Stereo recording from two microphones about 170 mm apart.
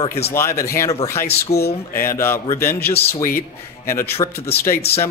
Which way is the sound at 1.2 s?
70° left (ahead or behind).